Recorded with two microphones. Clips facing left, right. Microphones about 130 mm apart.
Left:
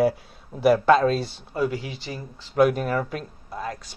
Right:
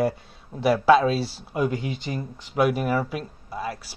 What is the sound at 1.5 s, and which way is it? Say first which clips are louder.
Speech: right 1 dB; 20° right (ahead or behind).